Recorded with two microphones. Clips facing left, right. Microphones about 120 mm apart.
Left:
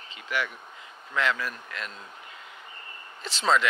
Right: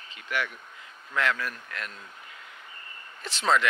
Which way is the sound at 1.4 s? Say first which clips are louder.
Left 1 dB; 20° left (ahead or behind).